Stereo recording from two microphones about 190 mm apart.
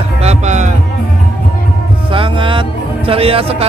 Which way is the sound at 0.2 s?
35° right (ahead or behind).